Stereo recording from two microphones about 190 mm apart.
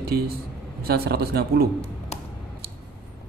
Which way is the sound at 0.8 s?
55° right (ahead or behind).